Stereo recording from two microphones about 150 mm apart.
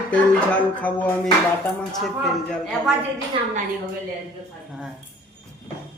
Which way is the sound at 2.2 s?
Centre (ahead or behind).